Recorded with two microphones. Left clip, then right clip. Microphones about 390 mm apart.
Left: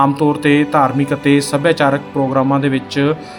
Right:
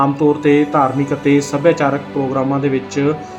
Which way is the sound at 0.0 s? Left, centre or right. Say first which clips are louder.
Even; left.